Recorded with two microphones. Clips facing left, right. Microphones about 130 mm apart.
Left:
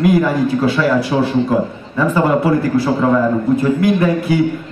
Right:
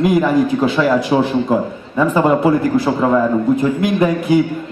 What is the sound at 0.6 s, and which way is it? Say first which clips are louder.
A man's voice: even; 20° right (ahead or behind).